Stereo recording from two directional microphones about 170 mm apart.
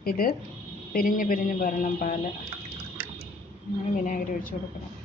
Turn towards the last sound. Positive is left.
turn(degrees=50)  # may be behind; listen again after turning